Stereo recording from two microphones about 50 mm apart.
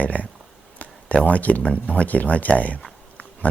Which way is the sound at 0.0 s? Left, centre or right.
Left.